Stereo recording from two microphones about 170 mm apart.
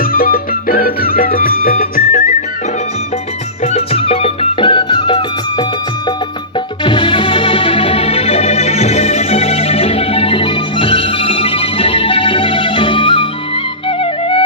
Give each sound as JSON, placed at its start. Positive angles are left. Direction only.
{"t": 0.0, "sound": "music", "side_deg": 60}
{"t": 3.7, "sound": "music", "side_deg": 35}
{"t": 6.8, "sound": "music", "side_deg": 30}
{"t": 14.0, "sound": "flute", "side_deg": 35}